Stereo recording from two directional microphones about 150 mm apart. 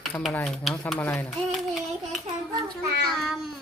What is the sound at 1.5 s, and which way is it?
Child singing, centre (ahead or behind).